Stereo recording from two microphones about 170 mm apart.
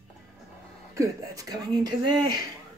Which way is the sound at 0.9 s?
20° right (ahead or behind).